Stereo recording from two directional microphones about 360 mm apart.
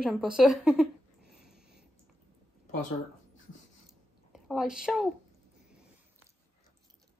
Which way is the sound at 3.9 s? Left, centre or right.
Centre.